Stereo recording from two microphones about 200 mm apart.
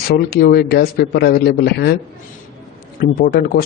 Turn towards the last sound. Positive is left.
turn(degrees=50)  # may be behind; listen again after turning